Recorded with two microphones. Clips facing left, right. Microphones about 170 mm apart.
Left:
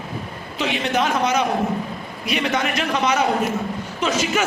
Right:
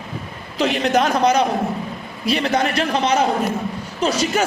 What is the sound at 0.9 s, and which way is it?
A man's voice, 35° right (ahead or behind).